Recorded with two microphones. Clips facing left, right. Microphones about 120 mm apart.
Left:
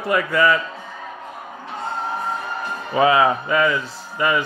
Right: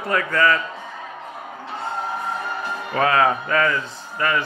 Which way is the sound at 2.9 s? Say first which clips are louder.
Left 3 dB; 10° left (ahead or behind).